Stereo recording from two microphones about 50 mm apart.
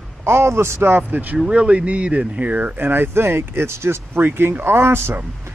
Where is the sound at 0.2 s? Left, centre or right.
Right.